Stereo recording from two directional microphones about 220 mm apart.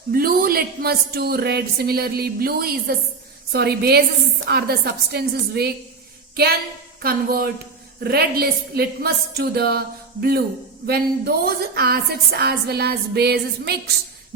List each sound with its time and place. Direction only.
0.1 s a woman's voice: 40° right (ahead or behind)
6.3 s a sound: 45° right (ahead or behind)
7.0 s a woman's voice: 40° right (ahead or behind)